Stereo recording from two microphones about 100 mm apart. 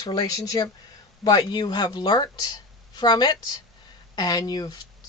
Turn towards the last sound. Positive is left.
turn(degrees=40)  # may be behind; listen again after turning